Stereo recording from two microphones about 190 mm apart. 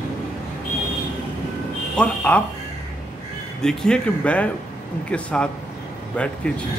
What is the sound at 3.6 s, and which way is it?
Speech, 5° left (ahead or behind).